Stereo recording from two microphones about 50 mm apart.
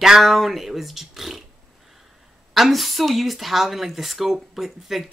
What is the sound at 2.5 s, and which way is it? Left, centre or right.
Speech, centre.